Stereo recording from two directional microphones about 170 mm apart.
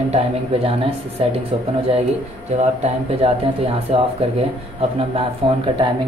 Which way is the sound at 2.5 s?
40° right (ahead or behind).